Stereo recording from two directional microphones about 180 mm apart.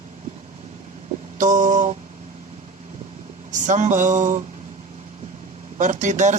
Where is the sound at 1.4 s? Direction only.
45° right (ahead or behind).